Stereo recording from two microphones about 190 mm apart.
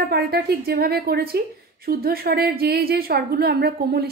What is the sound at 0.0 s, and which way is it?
A woman's voice, 55° right (ahead or behind).